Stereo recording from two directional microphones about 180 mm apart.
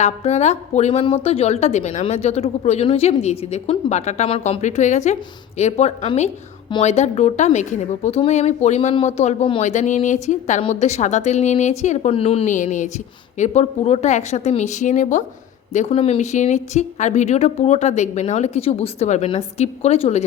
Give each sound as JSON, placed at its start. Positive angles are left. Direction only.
{"t": 0.0, "sound": "a woman's voice", "side_deg": 40}